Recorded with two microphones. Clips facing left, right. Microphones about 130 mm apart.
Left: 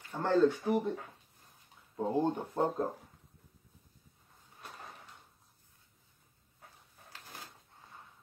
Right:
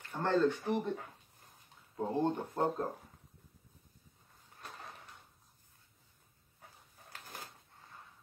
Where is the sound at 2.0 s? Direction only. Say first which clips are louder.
Left 2 dB; 10° left (ahead or behind).